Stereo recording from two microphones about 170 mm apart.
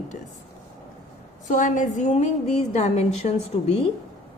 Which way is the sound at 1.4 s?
50° left (ahead or behind).